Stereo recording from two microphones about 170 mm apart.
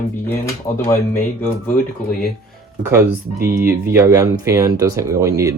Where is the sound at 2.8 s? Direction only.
15° right (ahead or behind).